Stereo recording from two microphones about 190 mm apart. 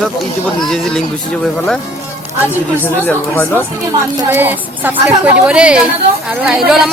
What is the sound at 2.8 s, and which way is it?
Speech, 10° left (ahead or behind).